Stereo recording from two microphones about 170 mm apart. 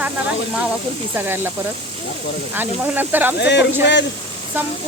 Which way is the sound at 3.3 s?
85° left.